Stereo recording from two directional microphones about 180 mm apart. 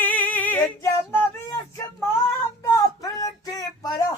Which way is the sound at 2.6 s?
20° left (ahead or behind).